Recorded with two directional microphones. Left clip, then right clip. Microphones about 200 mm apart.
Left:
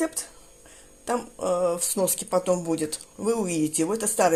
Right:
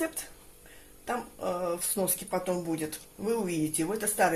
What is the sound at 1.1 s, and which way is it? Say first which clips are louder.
Speech: left 6 dB; 35° left (ahead or behind).